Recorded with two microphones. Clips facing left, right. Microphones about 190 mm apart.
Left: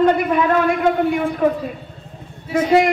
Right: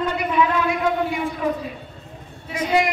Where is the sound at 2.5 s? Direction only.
55° left (ahead or behind).